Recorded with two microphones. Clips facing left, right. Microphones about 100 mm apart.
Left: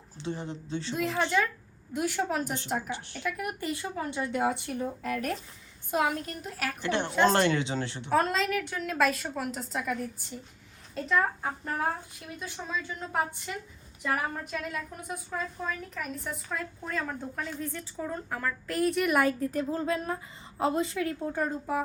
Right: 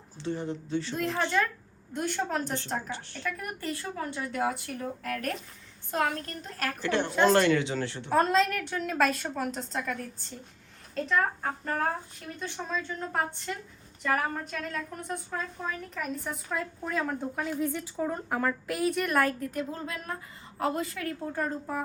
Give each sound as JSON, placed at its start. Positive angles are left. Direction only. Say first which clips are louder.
{"t": 0.2, "sound": "a woman's voice", "louder": "right 3 dB", "side_deg": 20}
{"t": 0.9, "sound": "a woman's voice", "louder": "left 1 dB", "side_deg": 5}
{"t": 5.9, "sound": "a woman's voice", "louder": "left 1 dB", "side_deg": 10}
{"t": 6.8, "sound": "a woman's voice", "louder": "right 1 dB", "side_deg": 25}
{"t": 8.1, "sound": "a woman's voice", "louder": "right 2 dB", "side_deg": 0}
{"t": 18.7, "sound": "a woman's voice", "louder": "left 6 dB", "side_deg": -5}
{"t": 19.4, "sound": "a woman's voice", "louder": "left 4 dB", "side_deg": 35}